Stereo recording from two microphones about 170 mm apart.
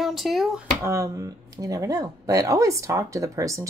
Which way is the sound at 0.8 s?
20° right (ahead or behind).